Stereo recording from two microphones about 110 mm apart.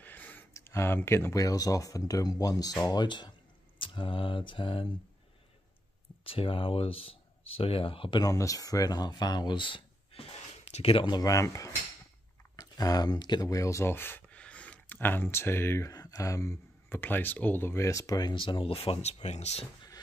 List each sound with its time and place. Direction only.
0.0 s speech: 15° left (ahead or behind); by 4.9 s 50° left (ahead or behind)
6.2 s speech: 55° left (ahead or behind)
8.2 s speech: 30° left (ahead or behind); by 11.1 s 55° left (ahead or behind)
11.1 s speech: 30° left (ahead or behind)
15.9 s speech: 35° left (ahead or behind); by 19.1 s 70° left (ahead or behind)
19.2 s speech: 85° left